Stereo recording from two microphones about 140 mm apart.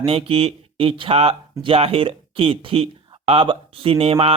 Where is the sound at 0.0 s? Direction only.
40° right (ahead or behind).